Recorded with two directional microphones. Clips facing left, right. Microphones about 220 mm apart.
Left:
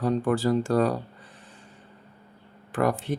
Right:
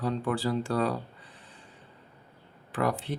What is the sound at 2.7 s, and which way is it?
Speech, 45° left (ahead or behind).